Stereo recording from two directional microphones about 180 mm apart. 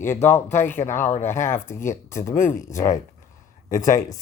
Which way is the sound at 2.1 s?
45° left (ahead or behind).